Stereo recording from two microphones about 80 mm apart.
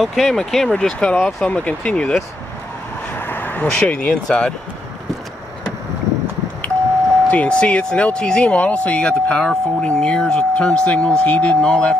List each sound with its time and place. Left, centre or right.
0.0 s speech: centre
3.2 s speech: left
7.2 s speech: centre